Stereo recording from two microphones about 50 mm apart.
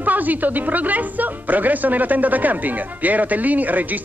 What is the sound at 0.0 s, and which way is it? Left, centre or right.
Speech, right.